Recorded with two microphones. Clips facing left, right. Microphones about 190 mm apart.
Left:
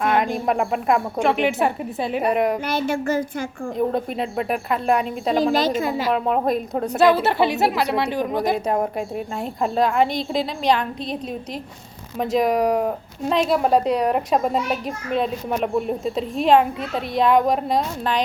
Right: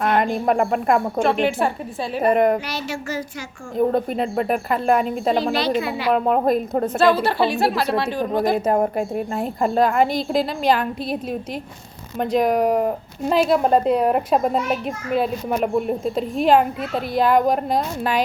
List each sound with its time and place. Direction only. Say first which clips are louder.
0.0 s speech: right 1 dB; centre (ahead or behind)
1.2 s a woman's voice: even; 15° left (ahead or behind)
2.2 s speech: right 4 dB; centre (ahead or behind)
2.6 s a woman's voice: left 6 dB; 55° left (ahead or behind)
3.8 s speech: right 4 dB; centre (ahead or behind)
5.4 s a woman's voice: left 1 dB; 45° left (ahead or behind)
6.1 s speech: right 3 dB; centre (ahead or behind)
7.0 s a woman's voice: left 2 dB; 20° left (ahead or behind)
8.5 s speech: right 3 dB; centre (ahead or behind)
12.2 s speech: right 1 dB; centre (ahead or behind)